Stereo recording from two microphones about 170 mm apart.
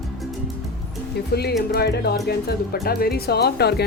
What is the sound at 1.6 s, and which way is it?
Speech, 65° left (ahead or behind).